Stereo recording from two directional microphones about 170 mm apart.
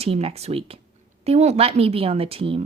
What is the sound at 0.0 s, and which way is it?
A woman's voice, 35° right (ahead or behind).